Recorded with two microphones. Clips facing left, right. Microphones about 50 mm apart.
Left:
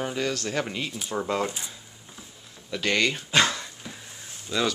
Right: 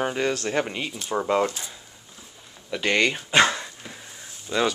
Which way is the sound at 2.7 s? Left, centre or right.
Centre.